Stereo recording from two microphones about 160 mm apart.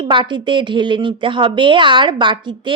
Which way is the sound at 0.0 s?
30° right (ahead or behind).